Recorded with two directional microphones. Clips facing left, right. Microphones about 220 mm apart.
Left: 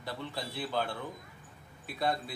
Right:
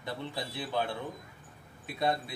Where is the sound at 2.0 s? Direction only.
20° right (ahead or behind).